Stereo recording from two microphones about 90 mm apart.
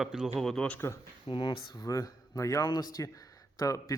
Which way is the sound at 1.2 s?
60° left (ahead or behind).